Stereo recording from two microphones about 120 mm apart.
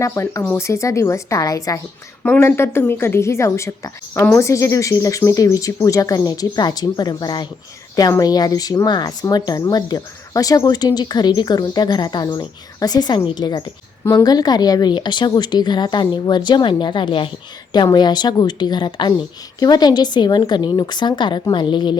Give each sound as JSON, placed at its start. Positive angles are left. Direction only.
{"t": 0.0, "sound": "speech", "side_deg": 25}
{"t": 2.2, "sound": "speech", "side_deg": 15}